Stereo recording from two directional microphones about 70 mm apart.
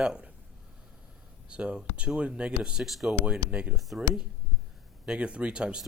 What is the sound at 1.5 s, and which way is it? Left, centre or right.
Speech, centre.